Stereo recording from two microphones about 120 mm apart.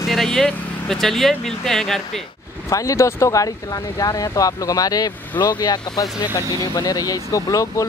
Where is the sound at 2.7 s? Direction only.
25° left (ahead or behind).